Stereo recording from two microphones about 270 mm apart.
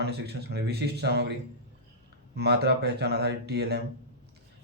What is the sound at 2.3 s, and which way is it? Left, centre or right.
A man's voice, right.